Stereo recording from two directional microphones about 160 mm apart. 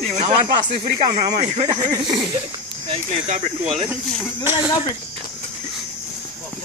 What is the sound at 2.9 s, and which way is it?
Speech, 40° right (ahead or behind).